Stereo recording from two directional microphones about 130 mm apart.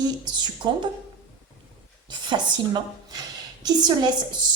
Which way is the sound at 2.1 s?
35° right (ahead or behind).